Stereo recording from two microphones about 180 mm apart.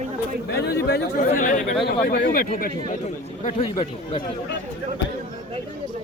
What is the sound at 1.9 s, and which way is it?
Speech, 55° left (ahead or behind).